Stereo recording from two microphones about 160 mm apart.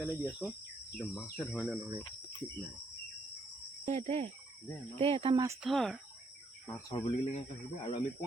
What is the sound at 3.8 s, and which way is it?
Cricket, 40° right (ahead or behind).